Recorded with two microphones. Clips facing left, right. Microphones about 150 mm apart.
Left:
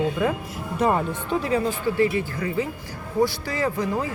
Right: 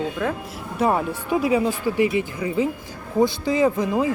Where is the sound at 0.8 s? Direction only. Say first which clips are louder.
Right 1 dB; 5° right (ahead or behind).